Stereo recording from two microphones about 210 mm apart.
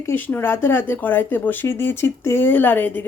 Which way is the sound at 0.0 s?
10° left (ahead or behind).